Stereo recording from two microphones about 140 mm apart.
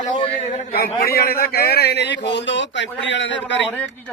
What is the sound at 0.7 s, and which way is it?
A man's voice, 90° left.